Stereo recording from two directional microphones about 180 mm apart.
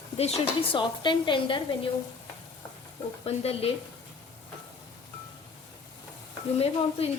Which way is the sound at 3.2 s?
35° left (ahead or behind).